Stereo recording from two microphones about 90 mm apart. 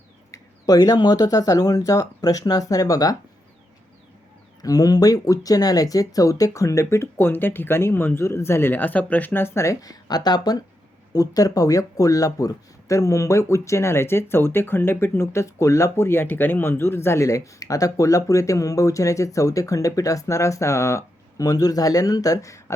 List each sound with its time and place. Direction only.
0.3 s speech: 45° left (ahead or behind)
4.6 s speech: 40° left (ahead or behind)